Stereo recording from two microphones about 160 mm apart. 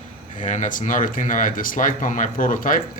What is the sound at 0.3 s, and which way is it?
Speech, 50° left (ahead or behind).